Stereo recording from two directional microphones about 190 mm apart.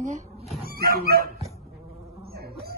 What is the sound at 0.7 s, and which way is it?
Dog, 55° right (ahead or behind).